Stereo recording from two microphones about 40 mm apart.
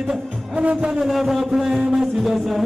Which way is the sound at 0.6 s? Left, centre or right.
Right.